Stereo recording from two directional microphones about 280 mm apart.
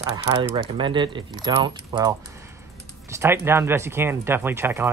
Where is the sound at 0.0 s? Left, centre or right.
Centre.